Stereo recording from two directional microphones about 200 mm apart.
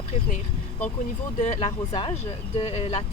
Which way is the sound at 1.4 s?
35° left (ahead or behind).